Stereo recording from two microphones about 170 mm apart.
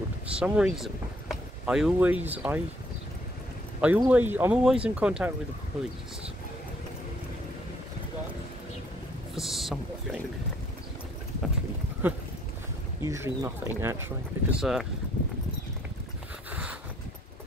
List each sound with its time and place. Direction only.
0.3 s speech: 5° right (ahead or behind)
3.8 s speech: 10° right (ahead or behind)
9.3 s speech: centre (ahead or behind)
13.0 s speech: 15° right (ahead or behind)
14.6 s speech: 5° right (ahead or behind)